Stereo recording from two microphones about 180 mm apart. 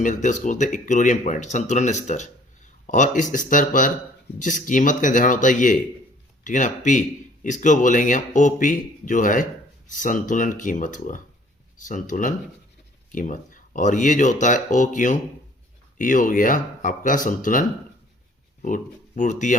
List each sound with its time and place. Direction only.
0.0 s speech: 45° left (ahead or behind)